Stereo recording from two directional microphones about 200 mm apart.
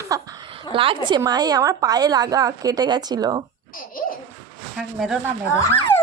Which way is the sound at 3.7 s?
45° left (ahead or behind).